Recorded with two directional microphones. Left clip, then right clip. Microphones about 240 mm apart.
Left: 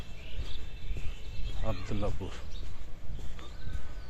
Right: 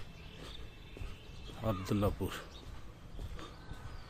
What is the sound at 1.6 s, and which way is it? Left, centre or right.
Speech, right.